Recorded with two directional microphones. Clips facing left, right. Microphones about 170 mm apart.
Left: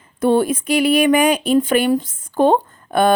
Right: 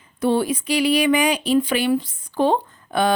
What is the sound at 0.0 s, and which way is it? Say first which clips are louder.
Speech: left 4 dB; 50° left (ahead or behind).